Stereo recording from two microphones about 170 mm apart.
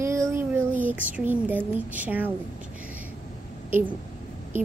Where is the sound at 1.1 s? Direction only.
10° right (ahead or behind).